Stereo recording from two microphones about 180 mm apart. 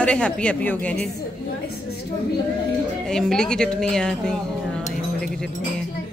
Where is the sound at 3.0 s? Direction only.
5° left (ahead or behind).